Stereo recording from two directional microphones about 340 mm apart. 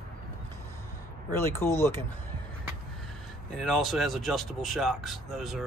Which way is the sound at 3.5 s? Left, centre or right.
Centre.